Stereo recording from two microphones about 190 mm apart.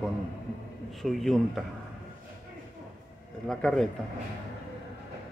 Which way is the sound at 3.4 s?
5° left (ahead or behind).